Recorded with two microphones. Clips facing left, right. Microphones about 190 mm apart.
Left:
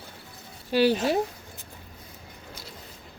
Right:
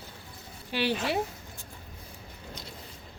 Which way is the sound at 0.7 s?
40° left (ahead or behind).